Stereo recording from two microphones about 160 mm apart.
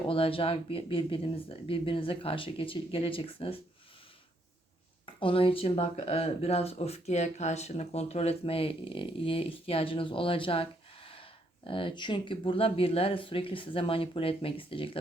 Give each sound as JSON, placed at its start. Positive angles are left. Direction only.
{"t": 0.1, "sound": "speech", "side_deg": 35}
{"t": 5.0, "sound": "speech", "side_deg": 35}